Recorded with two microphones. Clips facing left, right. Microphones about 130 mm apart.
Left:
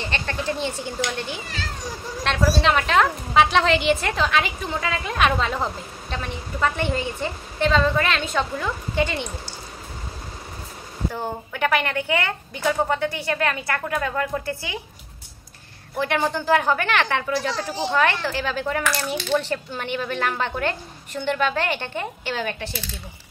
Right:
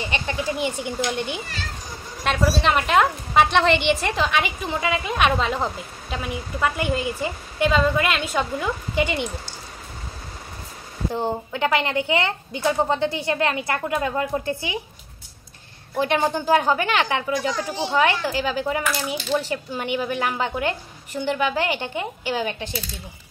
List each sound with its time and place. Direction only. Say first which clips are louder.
0.0 s a woman's voice: right 1 dB; 15° right (ahead or behind)
2.2 s a woman's voice: even; 5° right (ahead or behind)
11.1 s speech: right 5 dB; 20° right (ahead or behind)
16.0 s a woman's voice: right 2 dB; 15° right (ahead or behind)